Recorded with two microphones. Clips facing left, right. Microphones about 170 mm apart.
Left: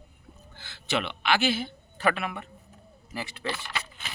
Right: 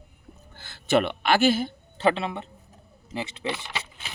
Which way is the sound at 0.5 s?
45° right (ahead or behind).